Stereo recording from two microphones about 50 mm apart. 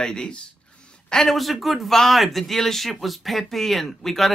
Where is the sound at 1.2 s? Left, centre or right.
Centre.